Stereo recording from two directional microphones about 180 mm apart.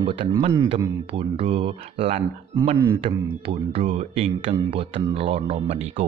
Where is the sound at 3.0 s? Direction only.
30° right (ahead or behind).